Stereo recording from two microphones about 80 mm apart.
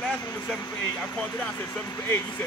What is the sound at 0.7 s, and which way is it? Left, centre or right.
Speech, centre.